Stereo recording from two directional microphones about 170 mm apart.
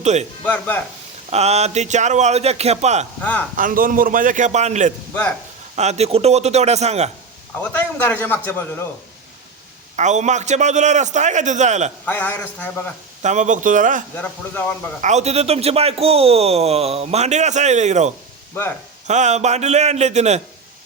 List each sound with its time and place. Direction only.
0.0 s speech: 40° right (ahead or behind)
0.4 s a man's voice: 10° left (ahead or behind)
1.3 s a man's voice: 40° right (ahead or behind)
3.2 s speech: 10° left (ahead or behind)
3.6 s a man's voice: 50° right (ahead or behind)
7.6 s a man's voice: 10° left (ahead or behind)
9.9 s a man's voice: 45° right (ahead or behind)
12.0 s a man's voice: 10° left (ahead or behind)
13.2 s a man's voice: 45° right (ahead or behind)
14.2 s a man's voice: 10° left (ahead or behind)
15.0 s a man's voice: 40° right (ahead or behind)